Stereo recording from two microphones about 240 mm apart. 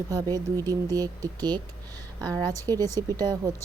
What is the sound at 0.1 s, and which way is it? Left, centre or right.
A woman's voice, centre.